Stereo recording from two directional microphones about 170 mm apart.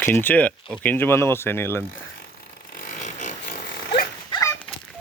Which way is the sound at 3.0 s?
45° left (ahead or behind).